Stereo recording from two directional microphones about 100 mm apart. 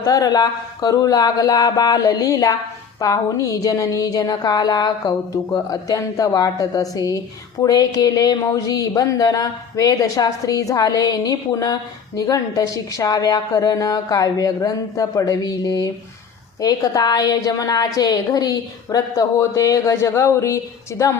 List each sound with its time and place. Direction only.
0.0 s speech: 40° left (ahead or behind)